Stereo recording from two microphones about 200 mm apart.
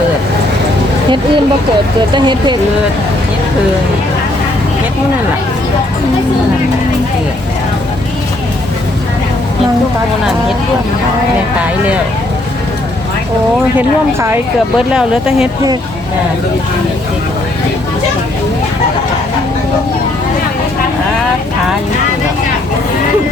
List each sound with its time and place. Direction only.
2.1 s speech: 25° right (ahead or behind)
13.7 s speech: 10° right (ahead or behind)